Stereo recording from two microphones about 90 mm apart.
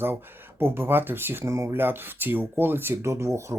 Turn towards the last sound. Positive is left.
turn(degrees=-35)  # may be behind; listen again after turning